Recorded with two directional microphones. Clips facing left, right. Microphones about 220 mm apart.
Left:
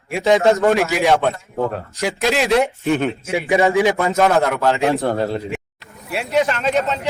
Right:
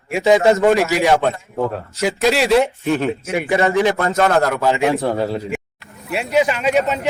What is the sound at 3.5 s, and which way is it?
Speech, 15° left (ahead or behind).